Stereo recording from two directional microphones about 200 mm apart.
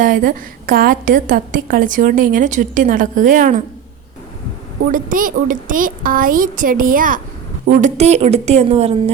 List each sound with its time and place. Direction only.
0.0 s a woman's voice: 45° right (ahead or behind)
4.9 s a woman's voice: 45° right (ahead or behind)